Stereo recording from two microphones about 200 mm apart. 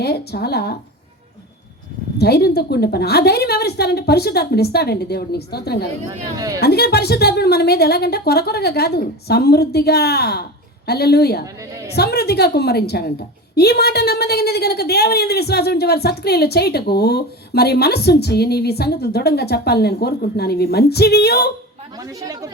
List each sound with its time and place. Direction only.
0.0 s a woman's voice: 55° left (ahead or behind)
2.1 s a woman's voice: 50° left (ahead or behind)
22.0 s speech: 15° right (ahead or behind)